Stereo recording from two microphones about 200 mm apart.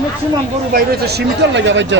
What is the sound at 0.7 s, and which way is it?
Speech, 55° right (ahead or behind).